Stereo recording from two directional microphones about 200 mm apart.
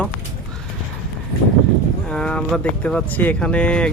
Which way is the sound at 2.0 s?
5° left (ahead or behind).